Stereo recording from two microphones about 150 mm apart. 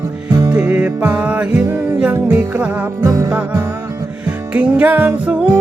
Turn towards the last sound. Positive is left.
turn(degrees=-10)  # may be behind; listen again after turning